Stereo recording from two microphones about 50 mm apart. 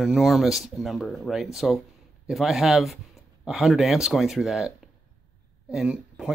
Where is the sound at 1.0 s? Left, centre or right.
Centre.